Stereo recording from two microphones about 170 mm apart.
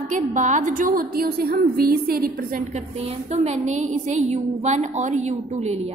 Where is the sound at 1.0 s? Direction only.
65° right (ahead or behind).